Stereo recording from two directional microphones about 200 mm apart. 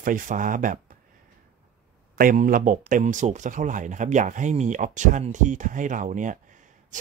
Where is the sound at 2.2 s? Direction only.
45° right (ahead or behind).